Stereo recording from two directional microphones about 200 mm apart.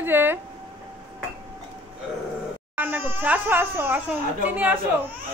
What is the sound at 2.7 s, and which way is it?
Speech, 10° right (ahead or behind).